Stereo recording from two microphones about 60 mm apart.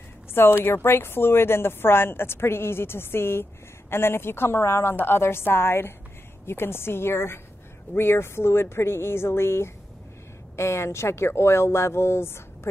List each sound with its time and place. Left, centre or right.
0.3 s a woman's voice: left